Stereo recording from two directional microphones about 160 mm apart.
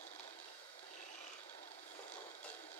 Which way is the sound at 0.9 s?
45° left (ahead or behind).